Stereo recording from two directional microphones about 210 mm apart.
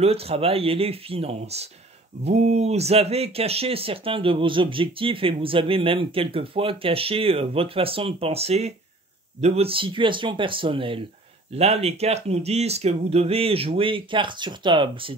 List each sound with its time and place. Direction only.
0.0 s speech: 30° right (ahead or behind)